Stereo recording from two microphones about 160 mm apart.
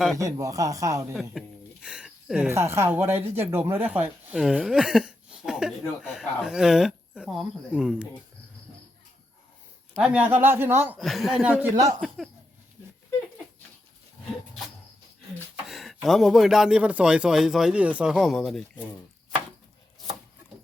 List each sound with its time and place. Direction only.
0.2 s speech: 20° right (ahead or behind)
1.1 s speech: centre (ahead or behind)
10.0 s speech: 10° right (ahead or behind)
10.9 s a man's voice: centre (ahead or behind)
15.6 s a man's voice: centre (ahead or behind)